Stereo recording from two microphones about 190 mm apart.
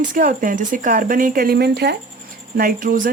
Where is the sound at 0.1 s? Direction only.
45° right (ahead or behind).